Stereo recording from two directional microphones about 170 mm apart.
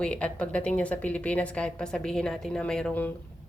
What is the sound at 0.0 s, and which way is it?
Speech, 5° left (ahead or behind).